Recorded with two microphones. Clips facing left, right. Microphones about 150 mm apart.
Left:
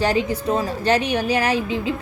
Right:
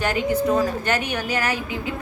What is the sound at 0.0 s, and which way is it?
A woman's voice, 30° left (ahead or behind).